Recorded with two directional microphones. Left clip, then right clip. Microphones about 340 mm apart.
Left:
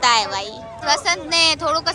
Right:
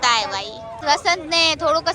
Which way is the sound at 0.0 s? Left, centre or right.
Centre.